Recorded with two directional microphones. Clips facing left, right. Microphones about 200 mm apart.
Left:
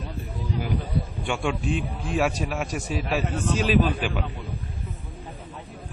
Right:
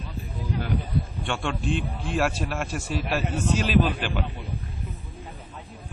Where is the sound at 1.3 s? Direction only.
5° left (ahead or behind).